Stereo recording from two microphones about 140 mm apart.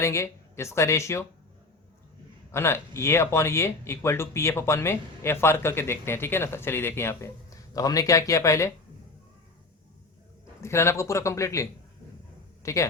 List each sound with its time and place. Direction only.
0.0 s speech: 20° left (ahead or behind)
2.5 s speech: 20° left (ahead or behind)
10.6 s speech: 20° left (ahead or behind)